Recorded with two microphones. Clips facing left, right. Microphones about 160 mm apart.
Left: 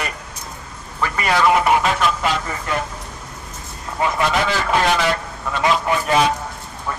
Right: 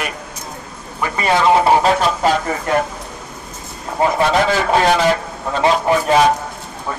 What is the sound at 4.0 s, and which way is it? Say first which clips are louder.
Speech: right 5 dB; 30° right (ahead or behind).